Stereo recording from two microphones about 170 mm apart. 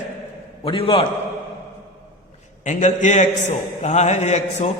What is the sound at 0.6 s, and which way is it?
Speech, 30° left (ahead or behind).